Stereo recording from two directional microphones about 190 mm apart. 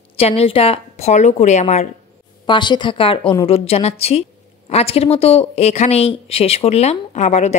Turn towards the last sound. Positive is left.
turn(degrees=35)  # may be behind; listen again after turning